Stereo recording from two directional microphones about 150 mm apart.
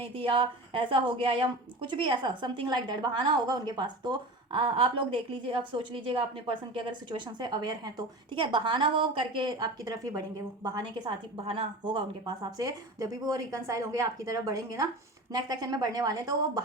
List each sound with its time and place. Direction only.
0.1 s a woman's voice: 35° right (ahead or behind)
11.4 s a woman's voice: 35° right (ahead or behind)